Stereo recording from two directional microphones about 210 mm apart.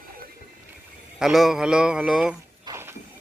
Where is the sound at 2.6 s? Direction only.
15° right (ahead or behind).